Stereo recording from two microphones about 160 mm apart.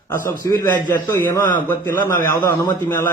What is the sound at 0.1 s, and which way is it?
A man's voice, 20° left (ahead or behind).